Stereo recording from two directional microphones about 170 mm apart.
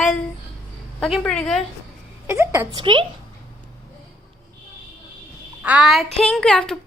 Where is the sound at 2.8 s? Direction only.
30° right (ahead or behind).